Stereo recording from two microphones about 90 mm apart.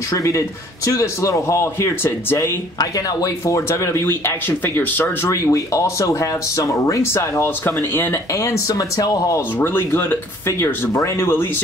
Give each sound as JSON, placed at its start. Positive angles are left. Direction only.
{"t": 0.1, "sound": "speech", "side_deg": 35}
{"t": 5.3, "sound": "speech", "side_deg": 35}
{"t": 9.6, "sound": "speech", "side_deg": 25}